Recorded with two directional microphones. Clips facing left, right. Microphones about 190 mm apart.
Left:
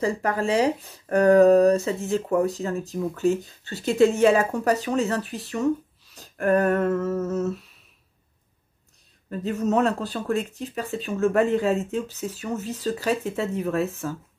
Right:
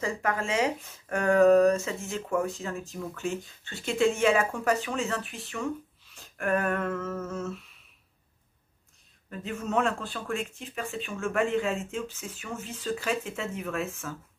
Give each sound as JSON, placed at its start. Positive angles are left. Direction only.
{"t": 0.0, "sound": "speech", "side_deg": 35}
{"t": 9.3, "sound": "speech", "side_deg": 35}